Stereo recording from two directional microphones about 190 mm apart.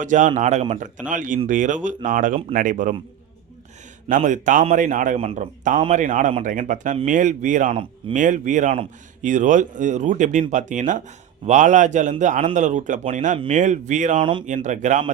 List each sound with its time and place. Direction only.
0.0 s speech: 40° right (ahead or behind)
4.1 s speech: 40° right (ahead or behind)